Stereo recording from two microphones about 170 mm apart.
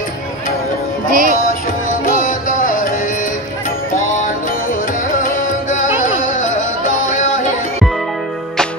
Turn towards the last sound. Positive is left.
turn(degrees=50)  # may be behind; listen again after turning